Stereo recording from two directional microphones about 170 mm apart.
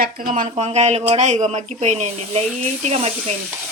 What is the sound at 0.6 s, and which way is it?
Sizzle, 40° right (ahead or behind).